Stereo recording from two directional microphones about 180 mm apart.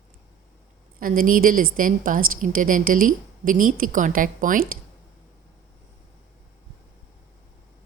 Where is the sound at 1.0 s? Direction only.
50° right (ahead or behind).